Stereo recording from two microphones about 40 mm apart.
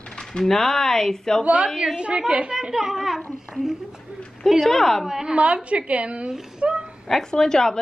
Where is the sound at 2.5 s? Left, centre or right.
Centre.